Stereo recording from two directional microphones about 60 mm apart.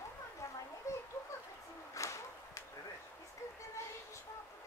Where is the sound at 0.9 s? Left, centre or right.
Left.